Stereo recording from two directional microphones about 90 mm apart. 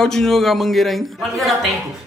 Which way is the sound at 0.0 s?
5° left (ahead or behind).